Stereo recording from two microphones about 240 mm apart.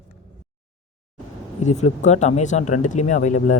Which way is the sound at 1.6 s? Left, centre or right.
Left.